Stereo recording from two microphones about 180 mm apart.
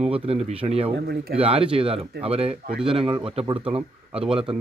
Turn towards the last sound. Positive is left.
turn(degrees=-30)  # may be behind; listen again after turning